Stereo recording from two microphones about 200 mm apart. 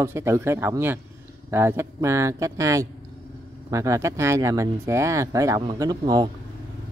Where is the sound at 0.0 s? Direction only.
15° right (ahead or behind).